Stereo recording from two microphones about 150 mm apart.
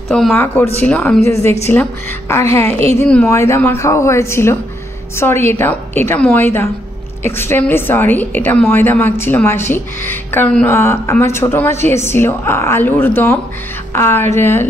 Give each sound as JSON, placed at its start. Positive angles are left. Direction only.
{"t": 0.1, "sound": "speech", "side_deg": 5}
{"t": 3.3, "sound": "speech", "side_deg": 20}